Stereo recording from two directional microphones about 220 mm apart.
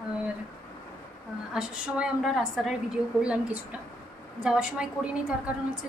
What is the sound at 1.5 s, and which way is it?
A woman's voice, 5° right (ahead or behind).